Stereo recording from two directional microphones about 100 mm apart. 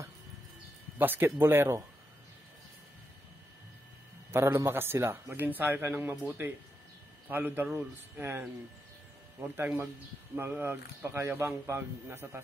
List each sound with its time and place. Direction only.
0.9 s a man's voice: 20° right (ahead or behind)
4.3 s a man's voice: 25° right (ahead or behind)
9.6 s a man's voice: 20° right (ahead or behind)